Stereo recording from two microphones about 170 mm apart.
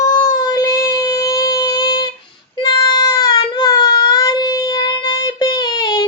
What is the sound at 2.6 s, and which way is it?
Child singing, 25° left (ahead or behind).